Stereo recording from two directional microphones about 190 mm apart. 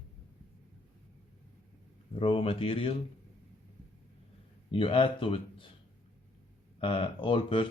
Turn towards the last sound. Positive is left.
turn(degrees=25)  # may be behind; listen again after turning